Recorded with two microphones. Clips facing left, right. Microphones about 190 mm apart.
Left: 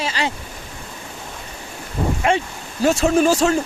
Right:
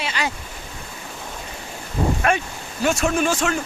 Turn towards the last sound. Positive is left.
turn(degrees=35)  # may be behind; listen again after turning